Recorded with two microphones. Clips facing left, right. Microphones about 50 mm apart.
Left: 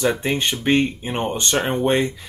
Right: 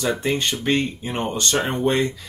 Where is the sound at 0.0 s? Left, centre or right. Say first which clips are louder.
Left 2 dB; centre.